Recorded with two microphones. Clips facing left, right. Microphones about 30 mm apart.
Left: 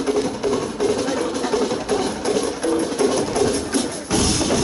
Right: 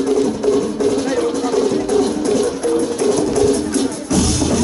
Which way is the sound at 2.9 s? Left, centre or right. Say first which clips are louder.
Right 3 dB; left.